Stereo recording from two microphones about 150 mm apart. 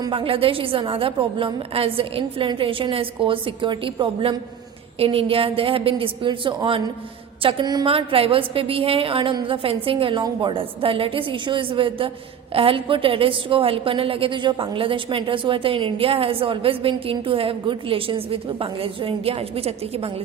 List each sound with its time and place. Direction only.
0.0 s a woman's voice: 35° right (ahead or behind)